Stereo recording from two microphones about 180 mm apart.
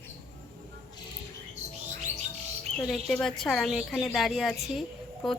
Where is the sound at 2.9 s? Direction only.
5° left (ahead or behind).